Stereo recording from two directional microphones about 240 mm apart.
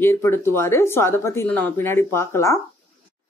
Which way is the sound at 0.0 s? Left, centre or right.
Centre.